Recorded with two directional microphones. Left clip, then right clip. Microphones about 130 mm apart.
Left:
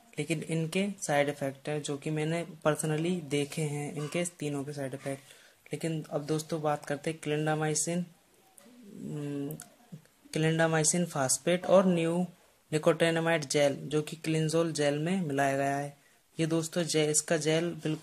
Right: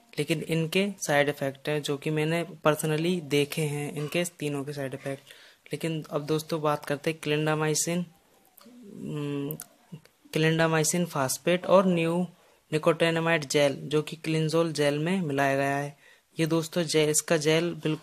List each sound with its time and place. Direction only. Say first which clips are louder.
0.1 s speech: right 5 dB; 25° right (ahead or behind)
9.1 s speech: right 4 dB; 25° right (ahead or behind)